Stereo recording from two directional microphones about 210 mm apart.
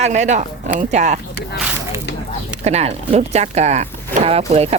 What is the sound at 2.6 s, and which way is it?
Speech, 30° right (ahead or behind).